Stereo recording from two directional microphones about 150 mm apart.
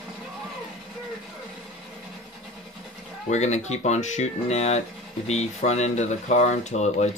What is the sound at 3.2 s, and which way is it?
Speech, 50° left (ahead or behind).